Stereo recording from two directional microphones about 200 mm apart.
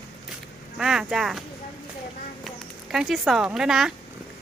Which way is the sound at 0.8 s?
5° right (ahead or behind).